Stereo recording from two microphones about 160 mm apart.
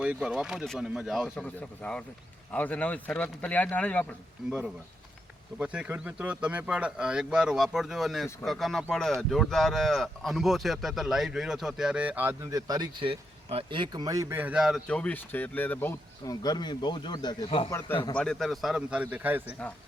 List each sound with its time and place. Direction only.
0.0 s speech: 5° right (ahead or behind)
1.4 s speech: 10° left (ahead or behind)
4.4 s speech: centre (ahead or behind)
5.5 s speech: 5° right (ahead or behind)
14.8 s speech: 10° left (ahead or behind); by 17.7 s 30° left (ahead or behind)
17.7 s speech: 15° left (ahead or behind)
17.9 s speech: 30° left (ahead or behind)
18.2 s speech: 5° left (ahead or behind)